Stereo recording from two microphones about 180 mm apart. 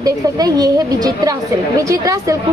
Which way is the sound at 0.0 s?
20° right (ahead or behind).